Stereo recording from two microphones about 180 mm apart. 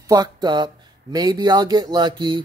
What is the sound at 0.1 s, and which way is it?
Speech, 25° right (ahead or behind).